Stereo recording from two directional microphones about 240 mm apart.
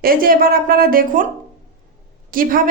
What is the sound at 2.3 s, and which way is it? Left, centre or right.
Speech, right.